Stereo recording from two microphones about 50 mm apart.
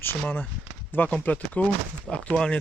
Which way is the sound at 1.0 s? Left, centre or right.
Left.